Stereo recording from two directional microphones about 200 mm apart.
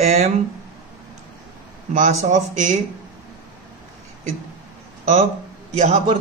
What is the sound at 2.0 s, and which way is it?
Speech, 40° right (ahead or behind).